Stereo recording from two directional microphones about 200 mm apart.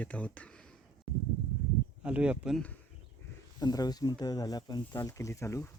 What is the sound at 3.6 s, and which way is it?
Speech, 20° left (ahead or behind).